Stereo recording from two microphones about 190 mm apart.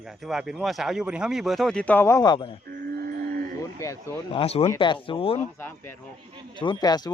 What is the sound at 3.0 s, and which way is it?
Livestock, 50° right (ahead or behind).